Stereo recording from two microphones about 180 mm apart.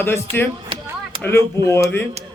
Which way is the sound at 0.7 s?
30° right (ahead or behind).